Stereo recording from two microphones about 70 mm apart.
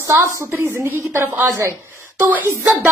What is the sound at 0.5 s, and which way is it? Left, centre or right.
Speech, right.